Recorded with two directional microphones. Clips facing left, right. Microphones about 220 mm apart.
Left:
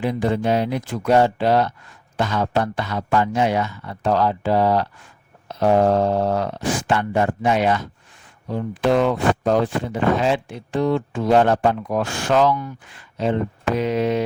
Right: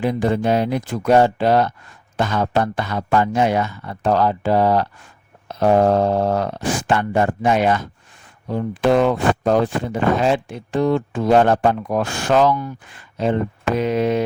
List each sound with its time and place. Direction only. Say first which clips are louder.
0.0 s speech: right 2 dB; 45° right (ahead or behind)